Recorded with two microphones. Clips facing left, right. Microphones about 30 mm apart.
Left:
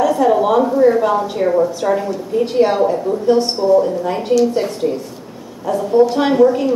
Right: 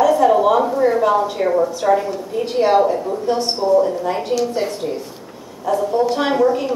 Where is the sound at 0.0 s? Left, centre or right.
Centre.